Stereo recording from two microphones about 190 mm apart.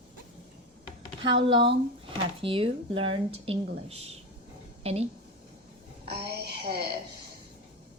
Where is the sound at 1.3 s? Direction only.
25° right (ahead or behind).